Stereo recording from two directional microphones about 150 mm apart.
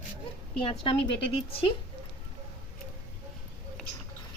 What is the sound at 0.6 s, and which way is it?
A woman's voice, 35° left (ahead or behind).